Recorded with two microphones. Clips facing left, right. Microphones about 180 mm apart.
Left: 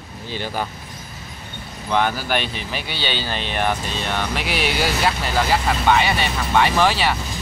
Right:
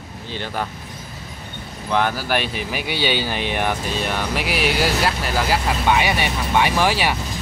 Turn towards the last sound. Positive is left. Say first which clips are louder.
# left 1 dB
turn(degrees=-10)  # may be behind; listen again after turning